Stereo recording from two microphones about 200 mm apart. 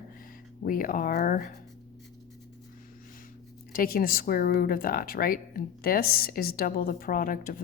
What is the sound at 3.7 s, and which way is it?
Speech, 45° left (ahead or behind).